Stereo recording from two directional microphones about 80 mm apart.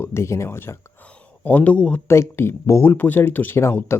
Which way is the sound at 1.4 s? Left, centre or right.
Centre.